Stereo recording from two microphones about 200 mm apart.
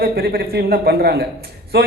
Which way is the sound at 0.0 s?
50° right (ahead or behind).